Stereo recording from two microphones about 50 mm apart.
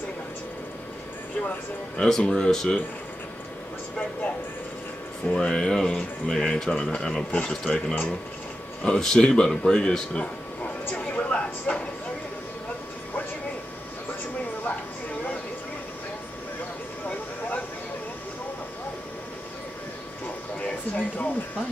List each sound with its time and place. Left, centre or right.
2.0 s speech: centre
5.3 s speech: centre
5.9 s music: left
6.4 s speech: centre
7.6 s music: centre
8.8 s speech: centre
9.6 s a sound: centre
20.6 s a sound: left